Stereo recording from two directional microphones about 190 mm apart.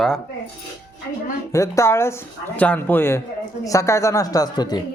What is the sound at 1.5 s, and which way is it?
A woman's voice, 15° left (ahead or behind).